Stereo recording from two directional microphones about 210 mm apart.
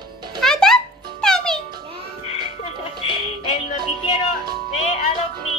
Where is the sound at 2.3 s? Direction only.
30° left (ahead or behind).